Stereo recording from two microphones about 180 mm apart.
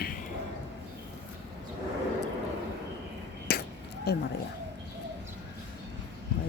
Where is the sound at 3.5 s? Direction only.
60° left (ahead or behind).